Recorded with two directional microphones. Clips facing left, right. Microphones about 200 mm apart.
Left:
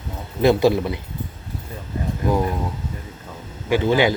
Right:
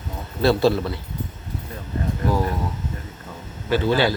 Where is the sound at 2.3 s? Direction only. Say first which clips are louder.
Left 3 dB; 20° left (ahead or behind).